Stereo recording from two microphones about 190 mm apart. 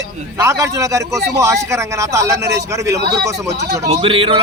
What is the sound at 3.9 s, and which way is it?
Speech, 30° right (ahead or behind).